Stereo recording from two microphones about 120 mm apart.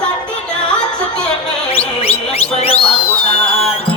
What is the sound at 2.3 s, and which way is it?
Music, 55° left (ahead or behind).